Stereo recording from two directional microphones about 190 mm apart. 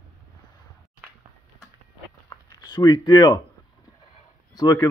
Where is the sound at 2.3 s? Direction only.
20° left (ahead or behind).